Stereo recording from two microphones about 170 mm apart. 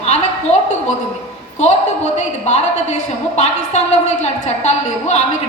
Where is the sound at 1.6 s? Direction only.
40° left (ahead or behind).